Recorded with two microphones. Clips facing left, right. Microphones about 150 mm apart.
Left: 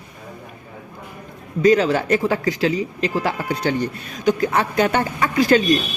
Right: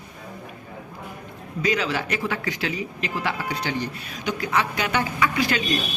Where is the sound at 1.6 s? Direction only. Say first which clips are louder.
Left 9 dB; 45° left (ahead or behind).